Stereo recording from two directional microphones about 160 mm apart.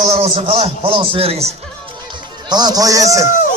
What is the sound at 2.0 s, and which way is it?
A man's voice, 25° right (ahead or behind).